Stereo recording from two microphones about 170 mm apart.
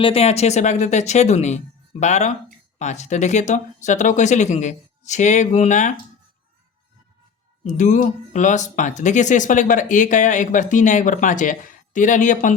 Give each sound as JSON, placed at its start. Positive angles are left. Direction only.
{"t": 0.0, "sound": "speech", "side_deg": 35}
{"t": 7.6, "sound": "speech", "side_deg": 45}